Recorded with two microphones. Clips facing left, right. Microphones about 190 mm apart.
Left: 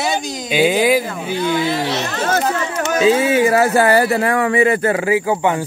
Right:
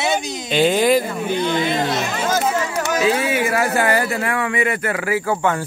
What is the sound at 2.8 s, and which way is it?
Speech, 25° left (ahead or behind).